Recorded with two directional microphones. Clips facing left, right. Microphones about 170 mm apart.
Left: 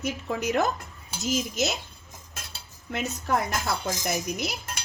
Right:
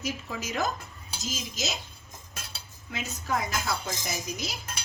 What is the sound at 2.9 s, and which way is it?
A woman's voice, 65° left (ahead or behind).